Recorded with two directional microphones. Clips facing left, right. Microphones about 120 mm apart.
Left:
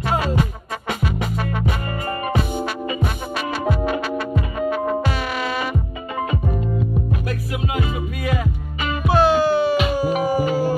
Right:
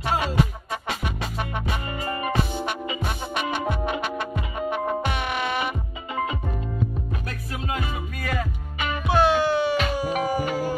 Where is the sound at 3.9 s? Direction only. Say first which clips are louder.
Left 5 dB; 20° right (ahead or behind).